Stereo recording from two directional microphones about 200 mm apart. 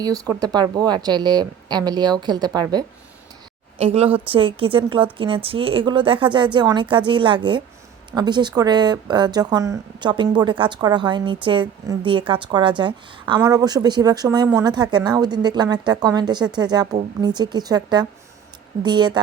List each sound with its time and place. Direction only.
0.0 s speech: 20° right (ahead or behind)
3.8 s speech: 30° right (ahead or behind)